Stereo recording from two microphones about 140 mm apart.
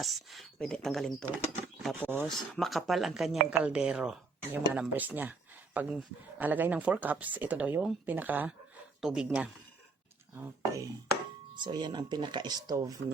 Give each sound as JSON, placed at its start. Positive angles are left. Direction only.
{"t": 0.0, "sound": "speech", "side_deg": 0}
{"t": 2.0, "sound": "speech", "side_deg": -15}
{"t": 2.2, "sound": "speech", "side_deg": 0}
{"t": 11.5, "sound": "speech", "side_deg": -35}